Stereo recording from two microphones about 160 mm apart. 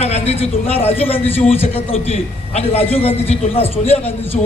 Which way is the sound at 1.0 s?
35° left (ahead or behind).